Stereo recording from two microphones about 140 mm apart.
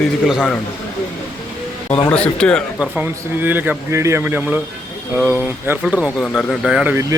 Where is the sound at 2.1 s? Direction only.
5° left (ahead or behind).